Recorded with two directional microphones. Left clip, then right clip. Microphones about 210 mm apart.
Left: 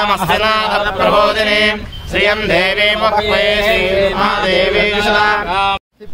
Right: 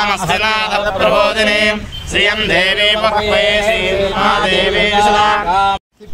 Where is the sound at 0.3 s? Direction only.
20° left (ahead or behind).